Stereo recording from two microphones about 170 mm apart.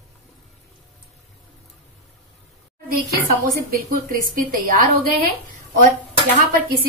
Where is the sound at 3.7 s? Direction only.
55° right (ahead or behind).